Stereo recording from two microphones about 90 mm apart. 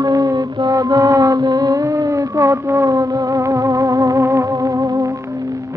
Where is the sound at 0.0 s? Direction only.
40° right (ahead or behind).